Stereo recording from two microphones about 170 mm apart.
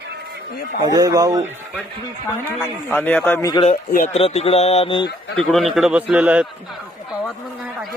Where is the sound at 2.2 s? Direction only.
10° left (ahead or behind).